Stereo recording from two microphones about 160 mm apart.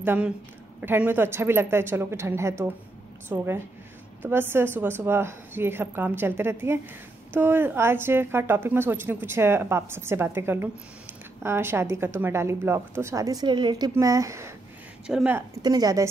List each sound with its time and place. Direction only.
0.0 s a woman's voice: 10° right (ahead or behind)
15.0 s a woman's voice: 10° right (ahead or behind)
15.6 s a woman's voice: 25° right (ahead or behind)